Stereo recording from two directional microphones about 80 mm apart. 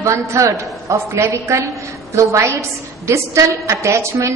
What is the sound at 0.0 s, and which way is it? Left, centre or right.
A woman's voice, right.